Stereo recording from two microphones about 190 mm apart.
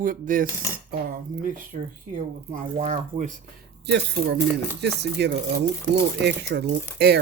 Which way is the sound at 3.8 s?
60° right (ahead or behind).